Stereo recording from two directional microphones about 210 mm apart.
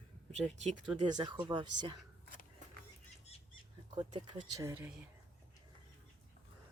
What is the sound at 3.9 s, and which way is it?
Speech, 20° right (ahead or behind).